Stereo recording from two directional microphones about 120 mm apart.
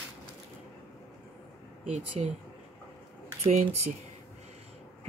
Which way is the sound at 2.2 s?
65° right (ahead or behind).